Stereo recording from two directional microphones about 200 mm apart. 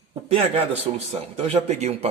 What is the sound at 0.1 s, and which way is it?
A man's voice, 30° right (ahead or behind).